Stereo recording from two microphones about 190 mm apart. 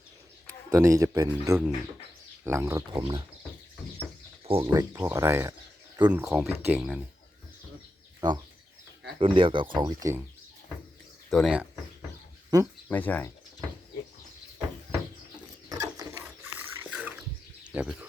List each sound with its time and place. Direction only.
0.7 s speech: 15° right (ahead or behind)
3.0 s speech: 25° right (ahead or behind)
4.4 s speech: 30° right (ahead or behind)
4.7 s speech: 15° right (ahead or behind)
9.1 s speech: 25° right (ahead or behind)
11.3 s speech: centre (ahead or behind)
12.5 s speech: 20° right (ahead or behind)
12.9 s speech: 10° left (ahead or behind)
15.8 s ratchet: 15° right (ahead or behind)
16.9 s water: 5° right (ahead or behind)
17.6 s bird: 5° right (ahead or behind)